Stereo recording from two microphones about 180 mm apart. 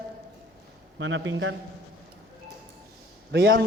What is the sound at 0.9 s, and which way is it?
Speech, 90° right.